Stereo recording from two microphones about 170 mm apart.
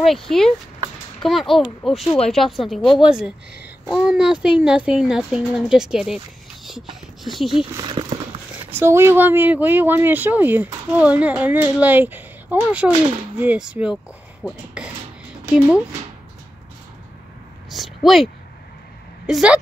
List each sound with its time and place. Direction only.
0.0 s speech: centre (ahead or behind)
7.7 s speech: 25° right (ahead or behind)
8.7 s speech: 15° right (ahead or behind)
17.6 s a sound: centre (ahead or behind)
19.2 s speech: 5° right (ahead or behind)